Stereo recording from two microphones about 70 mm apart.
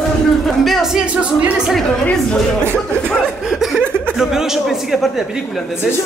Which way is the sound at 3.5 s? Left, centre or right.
Centre.